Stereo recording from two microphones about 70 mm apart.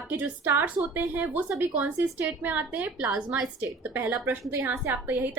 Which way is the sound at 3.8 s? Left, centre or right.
Right.